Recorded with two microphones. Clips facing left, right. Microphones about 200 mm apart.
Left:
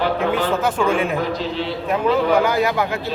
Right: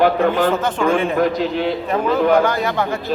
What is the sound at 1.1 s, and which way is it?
Speech, 50° right (ahead or behind).